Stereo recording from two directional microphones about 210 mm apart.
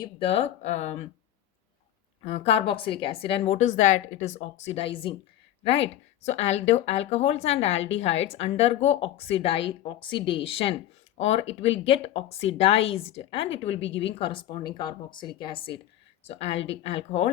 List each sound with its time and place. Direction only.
0.0 s a woman's voice: 25° left (ahead or behind)
2.2 s a woman's voice: 30° left (ahead or behind)